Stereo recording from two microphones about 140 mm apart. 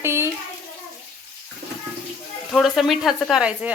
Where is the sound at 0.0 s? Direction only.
20° right (ahead or behind).